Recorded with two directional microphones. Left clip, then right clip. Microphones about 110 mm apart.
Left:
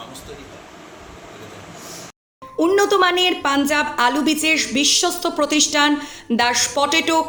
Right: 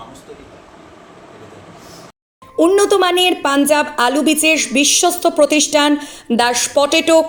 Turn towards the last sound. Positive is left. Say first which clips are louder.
# right 6 dB
turn(degrees=-15)  # may be behind; listen again after turning